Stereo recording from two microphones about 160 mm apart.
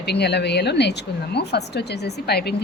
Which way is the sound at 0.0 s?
90° left.